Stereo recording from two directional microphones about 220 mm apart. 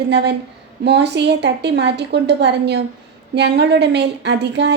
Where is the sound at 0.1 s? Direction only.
50° right (ahead or behind).